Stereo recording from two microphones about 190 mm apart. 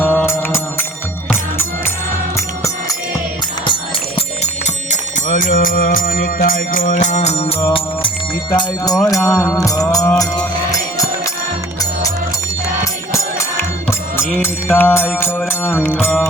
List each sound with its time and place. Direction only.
0.0 s music: 10° left (ahead or behind)
4.6 s music: 40° left (ahead or behind); by 11.0 s 15° left (ahead or behind)
12.8 s music: 15° left (ahead or behind)